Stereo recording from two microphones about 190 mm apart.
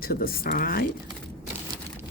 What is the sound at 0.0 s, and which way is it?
Speech, 50° left (ahead or behind).